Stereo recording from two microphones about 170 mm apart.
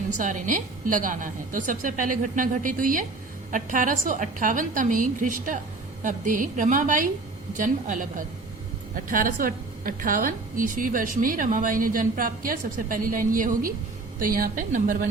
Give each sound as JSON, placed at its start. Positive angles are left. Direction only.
{"t": 0.1, "sound": "a woman's voice", "side_deg": -50}
{"t": 9.0, "sound": "a woman's voice", "side_deg": -55}